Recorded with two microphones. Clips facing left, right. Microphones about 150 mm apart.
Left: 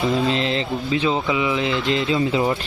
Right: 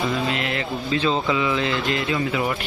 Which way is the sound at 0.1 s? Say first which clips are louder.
Left 4 dB; 25° left (ahead or behind).